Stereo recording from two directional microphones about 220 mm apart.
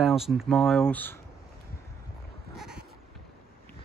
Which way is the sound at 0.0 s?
Centre (ahead or behind).